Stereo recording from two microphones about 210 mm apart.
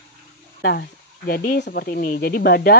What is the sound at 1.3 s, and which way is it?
Speech, 45° left (ahead or behind).